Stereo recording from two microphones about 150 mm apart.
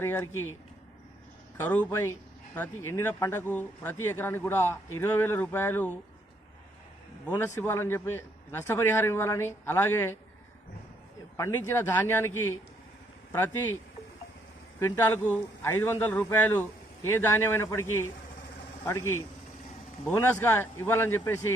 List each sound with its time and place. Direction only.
0.0 s speech: 15° left (ahead or behind)
1.5 s speech: 10° left (ahead or behind)
7.3 s speech: 15° left (ahead or behind)
11.3 s speech: 15° left (ahead or behind)
14.8 s speech: 15° left (ahead or behind)